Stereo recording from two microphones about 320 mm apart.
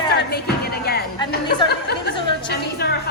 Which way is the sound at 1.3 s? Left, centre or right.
Left.